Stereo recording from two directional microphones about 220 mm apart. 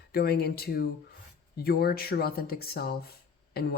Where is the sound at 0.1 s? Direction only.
45° left (ahead or behind).